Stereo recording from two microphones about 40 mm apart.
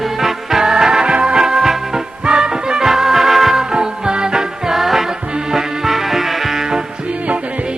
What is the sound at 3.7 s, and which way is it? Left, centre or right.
Music, right.